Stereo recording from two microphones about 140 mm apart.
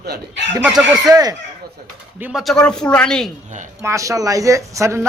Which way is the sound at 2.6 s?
5° left (ahead or behind).